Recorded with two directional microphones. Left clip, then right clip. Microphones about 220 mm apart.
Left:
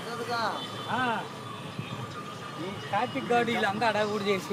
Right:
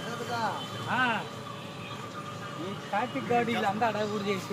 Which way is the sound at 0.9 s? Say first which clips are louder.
Right 1 dB; 25° right (ahead or behind).